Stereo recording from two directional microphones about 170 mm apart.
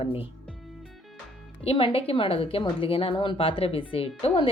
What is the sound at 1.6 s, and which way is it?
A woman's voice, 35° left (ahead or behind).